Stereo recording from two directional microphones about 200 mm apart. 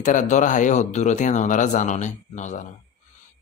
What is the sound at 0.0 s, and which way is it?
Speech, 40° left (ahead or behind).